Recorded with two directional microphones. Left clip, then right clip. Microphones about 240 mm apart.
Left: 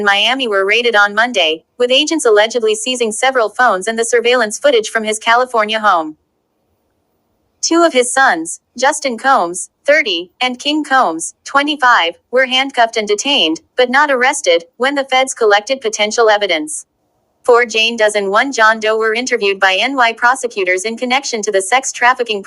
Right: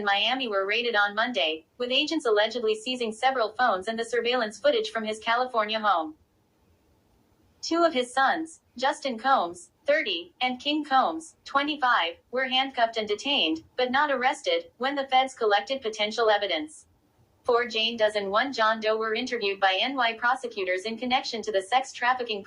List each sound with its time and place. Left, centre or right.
0.0 s a woman's voice: left
7.7 s a woman's voice: left